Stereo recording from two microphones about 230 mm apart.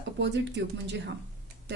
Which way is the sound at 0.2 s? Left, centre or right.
Right.